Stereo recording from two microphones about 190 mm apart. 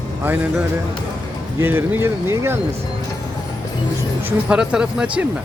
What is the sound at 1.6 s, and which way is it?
Speech, 10° right (ahead or behind).